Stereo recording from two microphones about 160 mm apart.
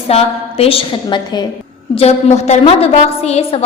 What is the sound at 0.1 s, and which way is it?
A woman's voice, 40° left (ahead or behind).